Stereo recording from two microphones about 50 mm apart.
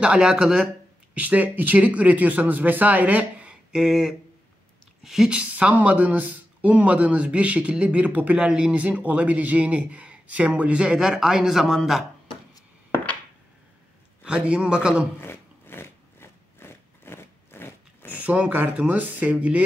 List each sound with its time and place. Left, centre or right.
0.0 s speech: right
1.1 s speech: right
3.7 s a sound: centre
5.0 s speech: centre
5.3 s speech: right
8.4 s a sound: centre
8.7 s speech: right; by 12.0 s centre
14.2 s speech: right
15.1 s a sound: left
18.1 s speech: right